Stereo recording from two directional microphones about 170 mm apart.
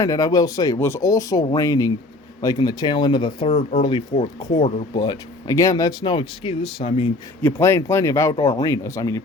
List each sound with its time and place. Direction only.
0.0 s speech: 20° left (ahead or behind)
7.4 s speech: 15° left (ahead or behind)